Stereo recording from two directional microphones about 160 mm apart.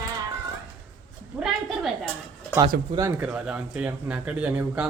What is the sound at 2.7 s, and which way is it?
Speech, 75° right (ahead or behind).